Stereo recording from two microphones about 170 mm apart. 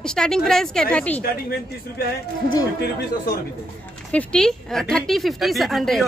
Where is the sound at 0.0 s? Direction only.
5° left (ahead or behind).